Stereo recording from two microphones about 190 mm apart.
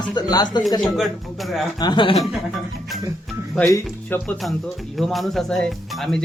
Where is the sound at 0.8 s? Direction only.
Centre (ahead or behind).